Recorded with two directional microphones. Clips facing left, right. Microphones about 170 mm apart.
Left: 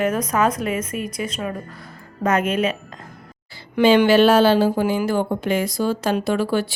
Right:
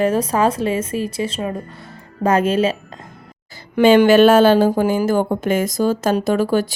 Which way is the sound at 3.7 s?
45° right (ahead or behind).